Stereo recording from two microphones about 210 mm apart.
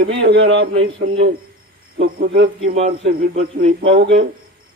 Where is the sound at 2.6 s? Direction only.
30° right (ahead or behind).